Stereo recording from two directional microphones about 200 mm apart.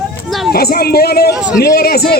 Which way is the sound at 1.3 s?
5° right (ahead or behind).